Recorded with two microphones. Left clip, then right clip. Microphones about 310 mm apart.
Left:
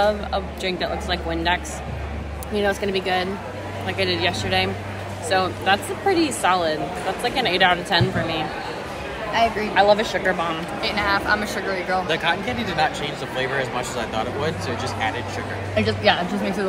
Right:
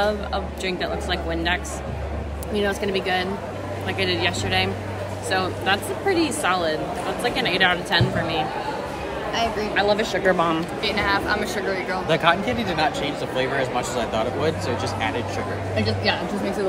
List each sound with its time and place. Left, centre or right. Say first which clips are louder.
0.0 s a woman's voice: left 2 dB; centre
12.1 s speech: right 6 dB; right
12.4 s speech: even; centre